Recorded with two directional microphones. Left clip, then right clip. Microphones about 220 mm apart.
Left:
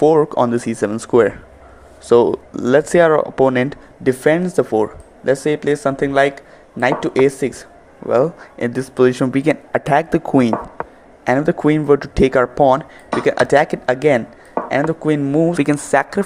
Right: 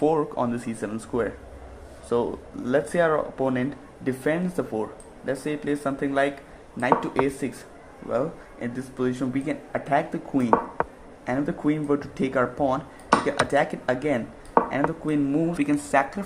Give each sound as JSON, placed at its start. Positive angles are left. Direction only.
{"t": 0.0, "sound": "speech", "side_deg": 30}
{"t": 10.8, "sound": "a sound", "side_deg": 0}
{"t": 11.3, "sound": "speech", "side_deg": 40}